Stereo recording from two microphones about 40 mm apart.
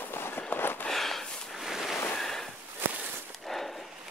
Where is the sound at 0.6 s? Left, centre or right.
Left.